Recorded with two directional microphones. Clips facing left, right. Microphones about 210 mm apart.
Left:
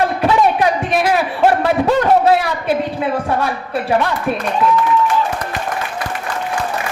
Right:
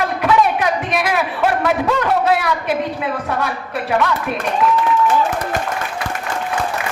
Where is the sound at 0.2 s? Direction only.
30° left (ahead or behind).